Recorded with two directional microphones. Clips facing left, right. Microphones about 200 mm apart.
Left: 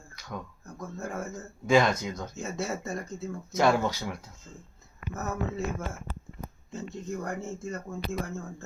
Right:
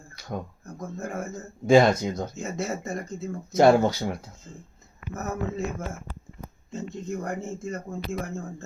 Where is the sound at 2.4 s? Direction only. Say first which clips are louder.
Right 2 dB; 20° right (ahead or behind).